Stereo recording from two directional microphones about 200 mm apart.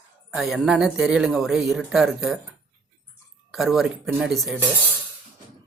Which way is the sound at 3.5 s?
Centre (ahead or behind).